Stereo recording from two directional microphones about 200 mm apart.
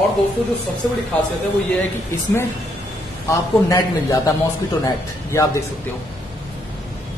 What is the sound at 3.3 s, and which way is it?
Speech, 15° left (ahead or behind).